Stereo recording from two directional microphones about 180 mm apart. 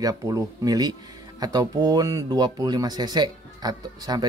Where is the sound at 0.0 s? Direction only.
20° right (ahead or behind).